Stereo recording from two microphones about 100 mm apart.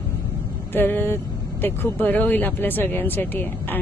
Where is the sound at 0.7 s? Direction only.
20° left (ahead or behind).